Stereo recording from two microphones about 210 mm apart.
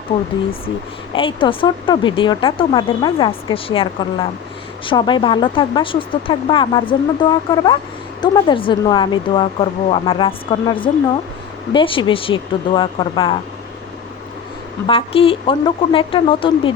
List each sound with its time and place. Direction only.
1.1 s speech: 25° left (ahead or behind)
14.8 s speech: 25° left (ahead or behind)